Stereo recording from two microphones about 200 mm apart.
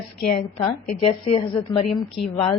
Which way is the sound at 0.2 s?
50° left (ahead or behind).